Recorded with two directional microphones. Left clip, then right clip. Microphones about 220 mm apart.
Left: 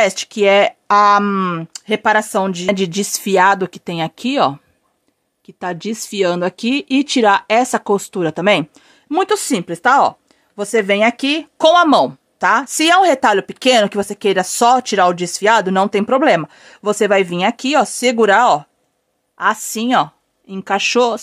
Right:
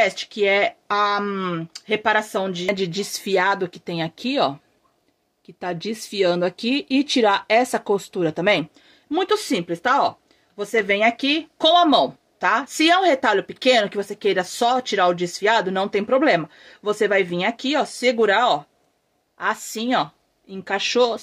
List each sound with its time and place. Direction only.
0.0 s speech: 50° left (ahead or behind)
5.6 s speech: 30° left (ahead or behind)